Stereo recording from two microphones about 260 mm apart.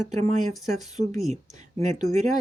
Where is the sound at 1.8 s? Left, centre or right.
Right.